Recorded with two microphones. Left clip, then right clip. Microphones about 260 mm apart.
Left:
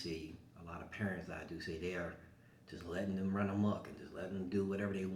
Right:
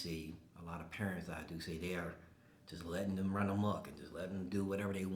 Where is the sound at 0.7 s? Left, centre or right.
Right.